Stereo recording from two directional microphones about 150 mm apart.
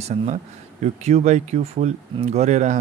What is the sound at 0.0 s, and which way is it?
Speech, 50° right (ahead or behind).